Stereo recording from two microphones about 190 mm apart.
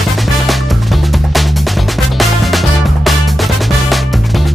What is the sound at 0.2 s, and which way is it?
Music, centre (ahead or behind).